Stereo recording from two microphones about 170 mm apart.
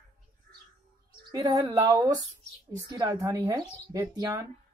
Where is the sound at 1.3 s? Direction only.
20° right (ahead or behind).